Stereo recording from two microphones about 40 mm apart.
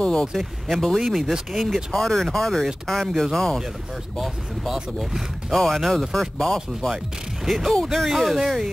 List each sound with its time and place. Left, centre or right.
0.0 s speech: left
0.7 s speech: centre
0.9 s speech: centre
1.6 s speech: centre
5.5 s speech: centre
7.4 s speech: centre